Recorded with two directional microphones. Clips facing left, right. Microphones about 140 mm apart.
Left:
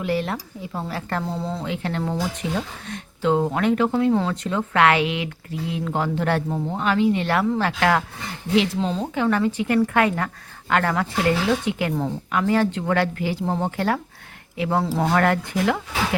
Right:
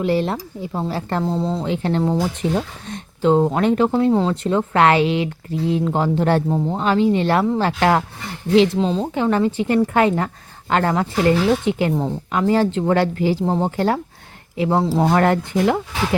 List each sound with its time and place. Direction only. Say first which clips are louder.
0.0 s speech: right 5 dB; 30° right (ahead or behind)
14.8 s speech: right 3 dB; 20° right (ahead or behind)